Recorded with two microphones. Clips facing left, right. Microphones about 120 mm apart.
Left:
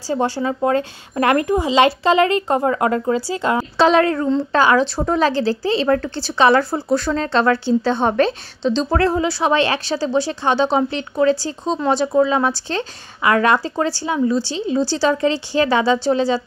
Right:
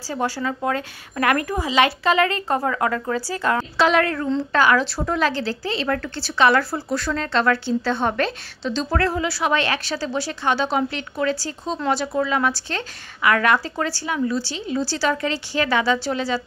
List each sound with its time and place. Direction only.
0.1 s a woman's voice: 25° left (ahead or behind)